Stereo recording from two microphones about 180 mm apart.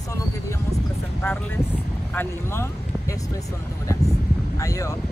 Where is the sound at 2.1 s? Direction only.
15° left (ahead or behind).